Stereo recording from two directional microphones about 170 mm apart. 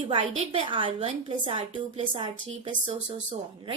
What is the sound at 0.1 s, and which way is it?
A woman's voice, 30° right (ahead or behind).